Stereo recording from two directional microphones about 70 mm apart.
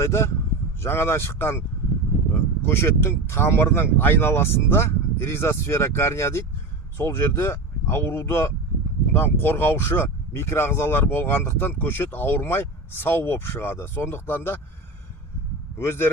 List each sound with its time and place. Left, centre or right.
0.0 s speech: left
15.8 s speech: left